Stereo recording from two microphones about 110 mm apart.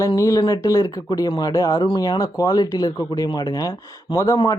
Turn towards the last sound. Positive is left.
turn(degrees=30)  # may be behind; listen again after turning